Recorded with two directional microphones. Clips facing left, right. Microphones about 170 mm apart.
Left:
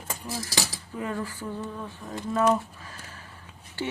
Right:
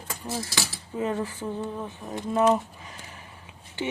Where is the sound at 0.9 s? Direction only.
20° right (ahead or behind).